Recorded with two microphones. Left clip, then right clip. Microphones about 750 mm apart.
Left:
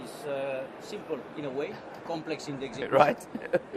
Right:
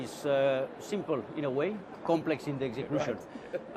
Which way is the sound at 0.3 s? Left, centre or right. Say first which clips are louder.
Right 6 dB; right.